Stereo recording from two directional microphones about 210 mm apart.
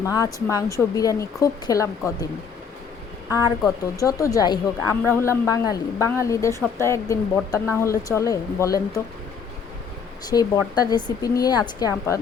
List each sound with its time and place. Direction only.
0.0 s a woman's voice: 15° left (ahead or behind)
3.2 s a woman's voice: 15° left (ahead or behind)
10.2 s a woman's voice: 20° left (ahead or behind)